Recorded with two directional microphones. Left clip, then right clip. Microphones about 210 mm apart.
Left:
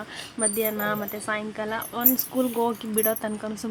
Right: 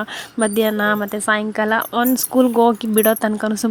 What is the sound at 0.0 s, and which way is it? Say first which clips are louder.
Speech: right 9 dB; 35° right (ahead or behind).